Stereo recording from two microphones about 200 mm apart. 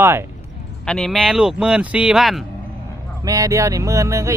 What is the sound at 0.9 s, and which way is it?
Speech, centre (ahead or behind).